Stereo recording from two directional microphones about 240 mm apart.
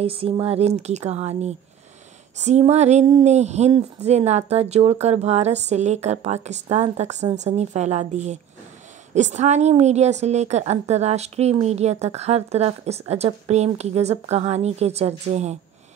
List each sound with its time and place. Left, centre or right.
0.0 s a woman's voice: right